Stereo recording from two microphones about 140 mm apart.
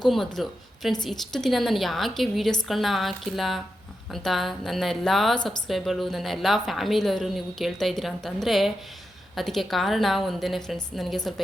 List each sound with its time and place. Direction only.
0.0 s a woman's voice: centre (ahead or behind)